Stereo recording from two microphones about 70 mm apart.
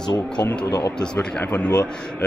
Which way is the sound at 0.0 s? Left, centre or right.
Left.